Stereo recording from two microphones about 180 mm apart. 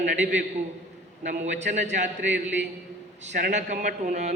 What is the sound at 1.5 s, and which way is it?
Speech, 40° right (ahead or behind).